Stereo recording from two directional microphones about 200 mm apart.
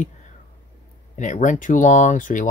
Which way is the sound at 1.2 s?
40° left (ahead or behind).